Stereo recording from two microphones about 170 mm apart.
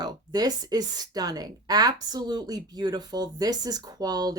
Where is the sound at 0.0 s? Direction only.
25° right (ahead or behind).